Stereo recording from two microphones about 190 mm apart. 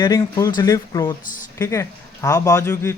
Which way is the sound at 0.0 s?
15° left (ahead or behind).